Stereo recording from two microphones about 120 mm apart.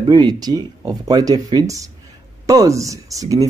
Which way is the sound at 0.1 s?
35° right (ahead or behind).